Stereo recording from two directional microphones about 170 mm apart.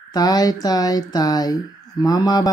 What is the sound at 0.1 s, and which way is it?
Speech, 20° left (ahead or behind).